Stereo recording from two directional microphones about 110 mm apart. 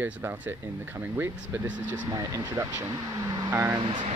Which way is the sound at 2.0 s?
35° right (ahead or behind).